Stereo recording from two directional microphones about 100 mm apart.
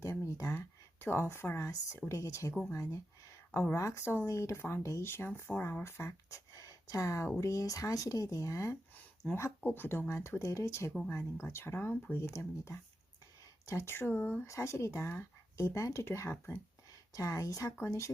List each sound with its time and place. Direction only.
0.0 s a sound: 30° left (ahead or behind)
0.5 s speech: 25° left (ahead or behind)
3.5 s speech: 20° left (ahead or behind)
3.8 s speech: 30° left (ahead or behind)
9.2 s speech: 10° left (ahead or behind); by 18.1 s 30° left (ahead or behind)